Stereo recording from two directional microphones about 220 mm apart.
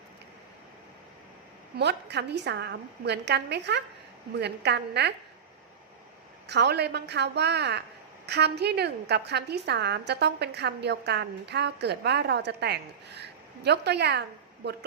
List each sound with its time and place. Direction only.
1.8 s a woman's voice: 50° right (ahead or behind)
6.5 s a woman's voice: 50° right (ahead or behind)